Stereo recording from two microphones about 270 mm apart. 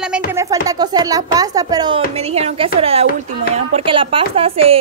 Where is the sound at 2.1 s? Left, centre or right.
Right.